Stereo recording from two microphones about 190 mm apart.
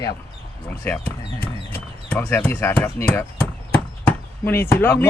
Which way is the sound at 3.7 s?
10° left (ahead or behind).